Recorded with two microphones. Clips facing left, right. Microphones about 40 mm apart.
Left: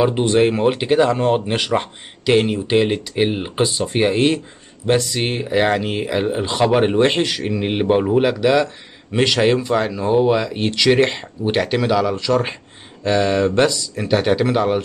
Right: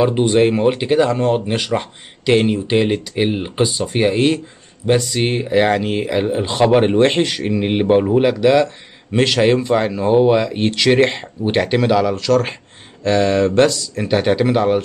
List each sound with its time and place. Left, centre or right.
0.2 s speech: centre
2.2 s speech: centre
12.2 s speech: centre
13.0 s speech: centre